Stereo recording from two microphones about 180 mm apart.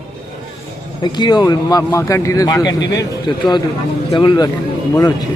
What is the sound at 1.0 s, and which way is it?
Speech, 25° left (ahead or behind).